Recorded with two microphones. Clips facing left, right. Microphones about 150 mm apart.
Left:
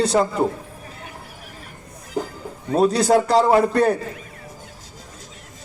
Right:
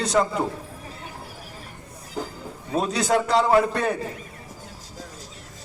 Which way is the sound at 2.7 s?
35° left (ahead or behind).